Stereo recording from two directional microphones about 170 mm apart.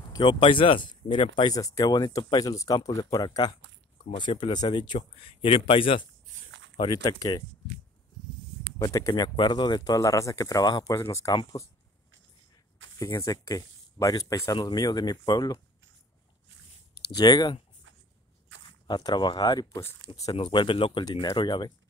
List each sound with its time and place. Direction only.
0.0 s speech: 25° left (ahead or behind)
8.7 s speech: 20° left (ahead or behind)
13.0 s speech: 20° left (ahead or behind)
17.1 s speech: 25° left (ahead or behind)
18.9 s speech: 25° left (ahead or behind)